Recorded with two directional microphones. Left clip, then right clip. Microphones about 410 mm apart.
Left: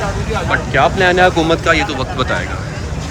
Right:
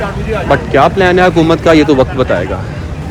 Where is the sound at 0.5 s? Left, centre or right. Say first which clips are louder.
Right 5 dB; centre.